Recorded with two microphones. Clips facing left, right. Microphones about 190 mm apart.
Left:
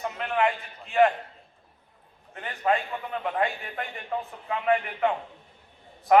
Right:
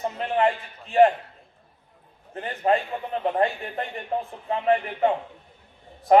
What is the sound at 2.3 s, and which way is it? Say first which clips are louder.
A man's voice: right 3 dB; 35° right (ahead or behind).